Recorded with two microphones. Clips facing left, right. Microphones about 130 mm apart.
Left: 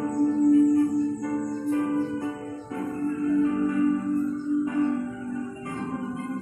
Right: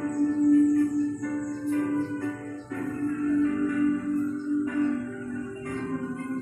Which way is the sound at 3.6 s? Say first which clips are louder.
Left 1 dB; 25° left (ahead or behind).